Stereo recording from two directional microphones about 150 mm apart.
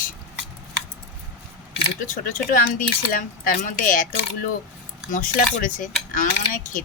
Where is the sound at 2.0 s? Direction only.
65° left (ahead or behind).